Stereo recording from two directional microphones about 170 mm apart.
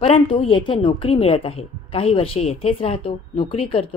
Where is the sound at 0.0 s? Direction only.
35° left (ahead or behind).